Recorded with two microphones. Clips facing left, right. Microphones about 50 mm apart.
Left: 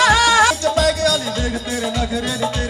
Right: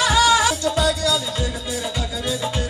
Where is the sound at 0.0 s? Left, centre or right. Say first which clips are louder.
Left 4 dB; left.